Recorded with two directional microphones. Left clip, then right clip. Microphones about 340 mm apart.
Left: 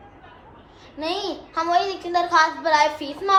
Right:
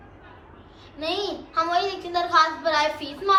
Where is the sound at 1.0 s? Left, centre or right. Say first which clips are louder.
Left 1 dB; centre.